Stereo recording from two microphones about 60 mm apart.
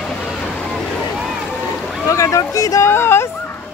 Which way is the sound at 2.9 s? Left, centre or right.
Left.